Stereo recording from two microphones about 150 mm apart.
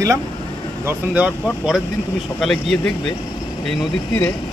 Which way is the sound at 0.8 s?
10° right (ahead or behind).